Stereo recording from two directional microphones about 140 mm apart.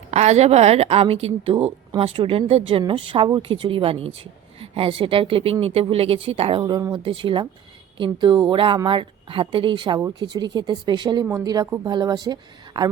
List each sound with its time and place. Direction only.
0.1 s a woman's voice: 55° right (ahead or behind); by 12.9 s 30° right (ahead or behind)